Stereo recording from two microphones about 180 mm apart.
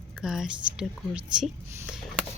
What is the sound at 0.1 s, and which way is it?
A woman's voice, centre (ahead or behind).